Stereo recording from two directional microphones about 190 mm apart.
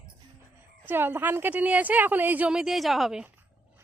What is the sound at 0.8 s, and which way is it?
A woman's voice, 10° right (ahead or behind).